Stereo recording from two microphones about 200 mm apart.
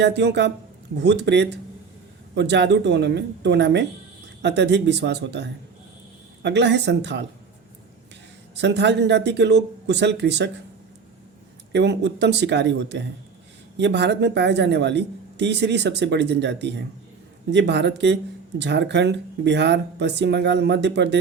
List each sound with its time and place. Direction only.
0.0 s speech: 60° right (ahead or behind)
8.5 s speech: 60° right (ahead or behind)
11.7 s speech: 60° right (ahead or behind)